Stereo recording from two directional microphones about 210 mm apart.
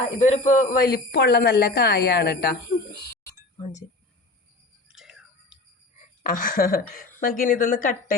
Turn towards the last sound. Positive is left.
turn(degrees=40)  # may be behind; listen again after turning